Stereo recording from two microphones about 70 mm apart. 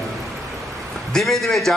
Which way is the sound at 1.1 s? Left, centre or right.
Centre.